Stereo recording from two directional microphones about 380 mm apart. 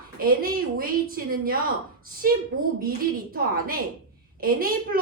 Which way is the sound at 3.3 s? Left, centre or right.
Right.